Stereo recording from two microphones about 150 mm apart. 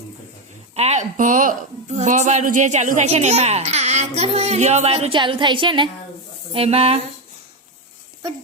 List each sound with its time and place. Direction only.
0.8 s a woman's voice: 50° right (ahead or behind)